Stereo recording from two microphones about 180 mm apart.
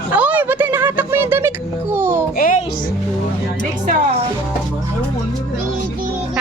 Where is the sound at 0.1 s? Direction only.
10° right (ahead or behind).